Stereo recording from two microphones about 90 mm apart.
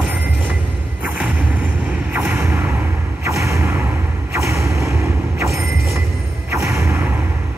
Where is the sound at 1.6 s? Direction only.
15° right (ahead or behind).